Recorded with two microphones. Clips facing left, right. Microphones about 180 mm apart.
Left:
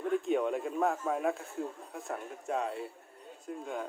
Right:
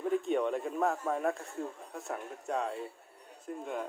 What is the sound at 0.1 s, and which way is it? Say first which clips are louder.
A man's voice: left 1 dB; centre (ahead or behind).